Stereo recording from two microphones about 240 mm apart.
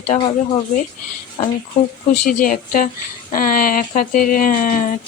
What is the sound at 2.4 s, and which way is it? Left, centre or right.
A woman's voice, left.